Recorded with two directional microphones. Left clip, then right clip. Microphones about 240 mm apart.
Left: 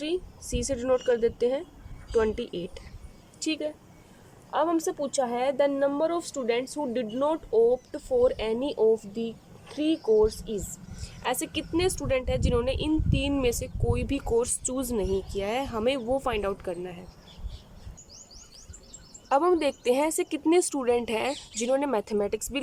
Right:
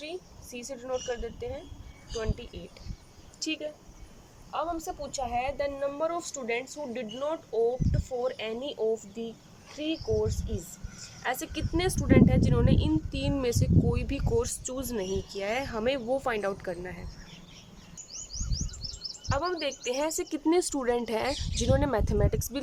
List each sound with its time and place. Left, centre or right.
0.0 s a woman's voice: left
3.4 s speech: centre
4.5 s a woman's voice: left; by 17.0 s centre
19.3 s speech: left